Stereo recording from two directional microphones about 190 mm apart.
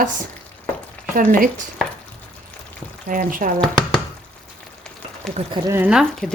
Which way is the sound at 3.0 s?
45° right (ahead or behind).